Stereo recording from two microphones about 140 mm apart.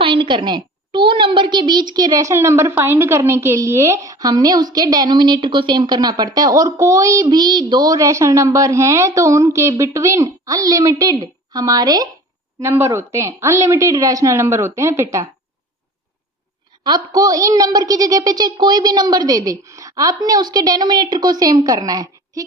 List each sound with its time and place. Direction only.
0.0 s a woman's voice: 35° right (ahead or behind); by 15.3 s 20° right (ahead or behind)
16.8 s a woman's voice: 30° right (ahead or behind)